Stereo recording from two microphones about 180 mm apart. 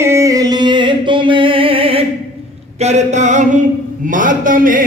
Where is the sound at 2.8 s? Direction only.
40° right (ahead or behind).